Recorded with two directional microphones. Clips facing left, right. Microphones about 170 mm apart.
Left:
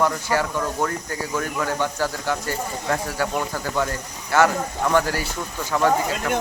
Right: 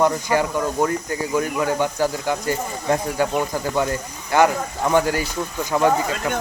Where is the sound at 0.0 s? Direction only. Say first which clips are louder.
Right 3 dB; 20° right (ahead or behind).